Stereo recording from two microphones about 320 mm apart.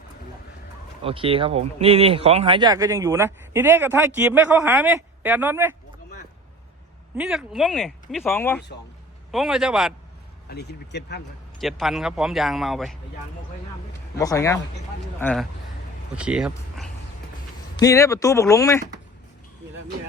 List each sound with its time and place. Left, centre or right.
1.0 s speech: centre
7.2 s a man's voice: centre
10.5 s speech: left
11.6 s a man's voice: centre
14.2 s a man's voice: centre
17.7 s speech: centre